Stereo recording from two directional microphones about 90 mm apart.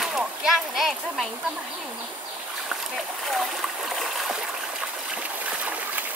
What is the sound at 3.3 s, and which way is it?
Stream, centre (ahead or behind).